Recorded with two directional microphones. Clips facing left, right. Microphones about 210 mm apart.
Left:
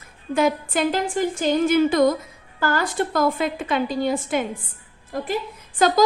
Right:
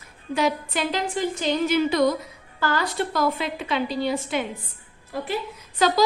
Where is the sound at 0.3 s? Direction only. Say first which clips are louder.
Left 4 dB; 50° left (ahead or behind).